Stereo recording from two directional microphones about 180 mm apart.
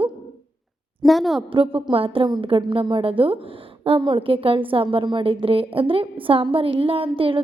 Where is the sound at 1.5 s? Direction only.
30° right (ahead or behind).